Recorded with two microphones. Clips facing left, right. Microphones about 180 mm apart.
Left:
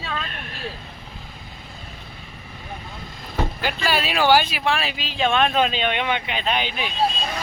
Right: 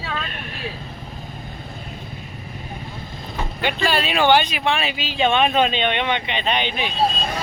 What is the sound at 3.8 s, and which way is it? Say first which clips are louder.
Speech: right 1 dB; 5° left (ahead or behind).